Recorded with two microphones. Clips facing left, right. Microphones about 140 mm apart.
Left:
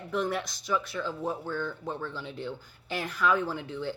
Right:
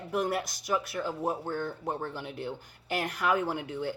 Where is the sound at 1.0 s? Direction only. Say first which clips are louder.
Right 1 dB; 15° right (ahead or behind).